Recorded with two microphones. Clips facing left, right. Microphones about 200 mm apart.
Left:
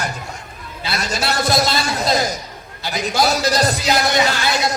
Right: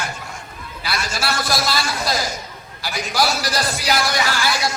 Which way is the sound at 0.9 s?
25° left (ahead or behind).